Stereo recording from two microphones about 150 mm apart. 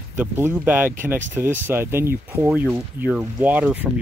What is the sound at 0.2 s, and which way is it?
Speech, 10° right (ahead or behind).